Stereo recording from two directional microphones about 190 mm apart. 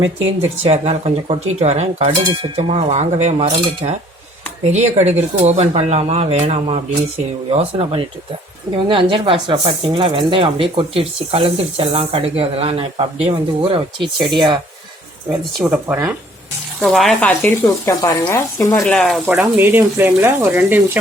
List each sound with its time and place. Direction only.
0.0 s speech: 90° right
0.6 s speech: 35° right (ahead or behind)
15.6 s speech: 10° right (ahead or behind)
17.8 s speech: 15° left (ahead or behind); by 21.0 s 10° right (ahead or behind)